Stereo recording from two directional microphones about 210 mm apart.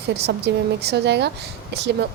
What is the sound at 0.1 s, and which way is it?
A woman's voice, 50° right (ahead or behind).